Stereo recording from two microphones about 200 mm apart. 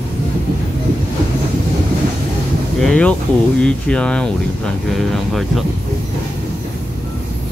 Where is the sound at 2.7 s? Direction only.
5° left (ahead or behind).